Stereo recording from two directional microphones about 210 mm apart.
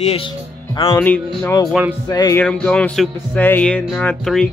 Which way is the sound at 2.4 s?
5° left (ahead or behind).